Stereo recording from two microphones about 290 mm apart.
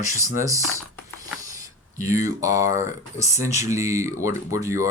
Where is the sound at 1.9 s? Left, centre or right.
Centre.